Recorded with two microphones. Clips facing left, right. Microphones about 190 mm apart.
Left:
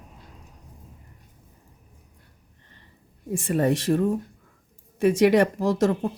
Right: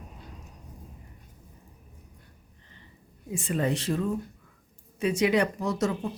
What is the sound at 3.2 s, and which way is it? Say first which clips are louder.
Speech: left 5 dB; 50° left (ahead or behind).